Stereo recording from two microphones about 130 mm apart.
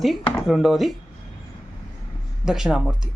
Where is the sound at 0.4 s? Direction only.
Centre (ahead or behind).